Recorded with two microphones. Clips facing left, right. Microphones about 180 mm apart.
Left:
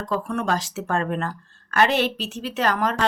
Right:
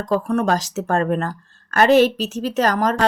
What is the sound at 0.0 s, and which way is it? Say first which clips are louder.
A woman's voice: right 6 dB; 45° right (ahead or behind).